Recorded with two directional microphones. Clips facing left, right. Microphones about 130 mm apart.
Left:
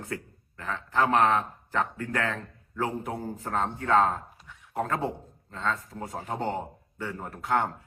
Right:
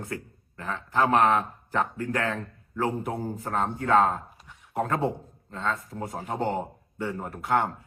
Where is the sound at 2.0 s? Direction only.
30° right (ahead or behind).